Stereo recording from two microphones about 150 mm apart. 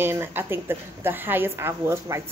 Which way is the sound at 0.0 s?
15° right (ahead or behind).